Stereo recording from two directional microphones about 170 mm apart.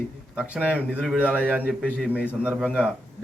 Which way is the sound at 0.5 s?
10° right (ahead or behind).